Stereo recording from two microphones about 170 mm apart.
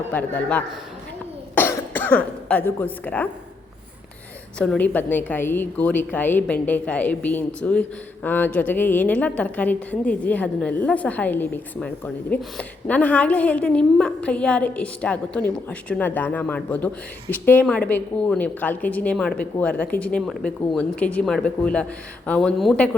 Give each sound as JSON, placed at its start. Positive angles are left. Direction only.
{"t": 0.1, "sound": "a woman's voice", "side_deg": 10}
{"t": 4.5, "sound": "a woman's voice", "side_deg": 5}